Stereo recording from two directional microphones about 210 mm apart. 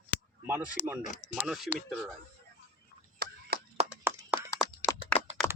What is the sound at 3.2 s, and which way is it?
Chop, 50° right (ahead or behind).